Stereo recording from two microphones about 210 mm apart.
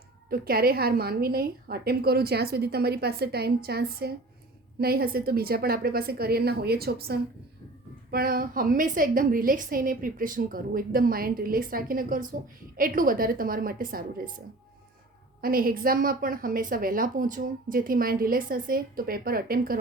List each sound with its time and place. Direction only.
0.3 s a woman's voice: 45° right (ahead or behind)
15.4 s a woman's voice: 45° right (ahead or behind)